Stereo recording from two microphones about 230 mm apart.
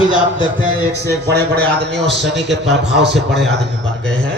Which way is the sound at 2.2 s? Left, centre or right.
Centre.